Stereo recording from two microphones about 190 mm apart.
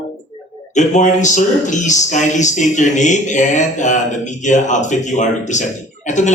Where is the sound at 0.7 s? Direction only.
40° left (ahead or behind).